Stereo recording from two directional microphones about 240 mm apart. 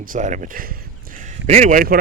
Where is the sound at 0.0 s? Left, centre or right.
Right.